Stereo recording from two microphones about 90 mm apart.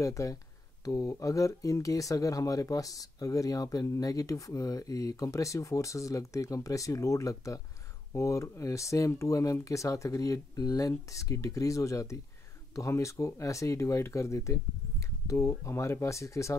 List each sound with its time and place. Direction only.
0.0 s speech: 35° left (ahead or behind)